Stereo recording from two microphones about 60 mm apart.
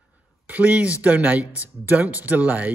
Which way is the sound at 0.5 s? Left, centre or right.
Right.